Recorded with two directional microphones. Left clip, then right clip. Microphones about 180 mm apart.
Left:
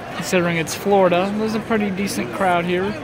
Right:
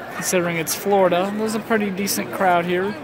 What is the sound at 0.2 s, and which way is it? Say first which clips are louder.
Speech: left 2 dB; 5° right (ahead or behind).